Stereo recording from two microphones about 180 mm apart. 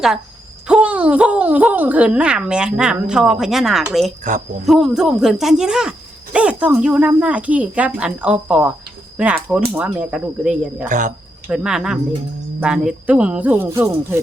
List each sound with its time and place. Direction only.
0.7 s speech: 5° right (ahead or behind)
4.2 s speech: 40° right (ahead or behind)
4.6 s speech: centre (ahead or behind)
10.8 s speech: 45° right (ahead or behind)
11.4 s speech: 5° right (ahead or behind)